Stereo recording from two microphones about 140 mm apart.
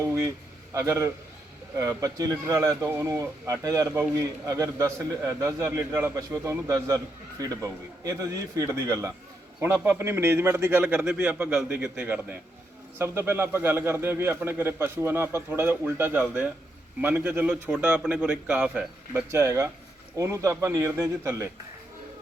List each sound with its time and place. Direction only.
0.7 s a man's voice: 20° right (ahead or behind)
3.8 s a man's voice: 10° right (ahead or behind)
4.2 s a man's voice: 20° right (ahead or behind)